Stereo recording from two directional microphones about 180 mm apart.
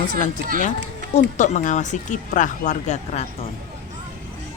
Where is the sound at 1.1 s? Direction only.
40° left (ahead or behind).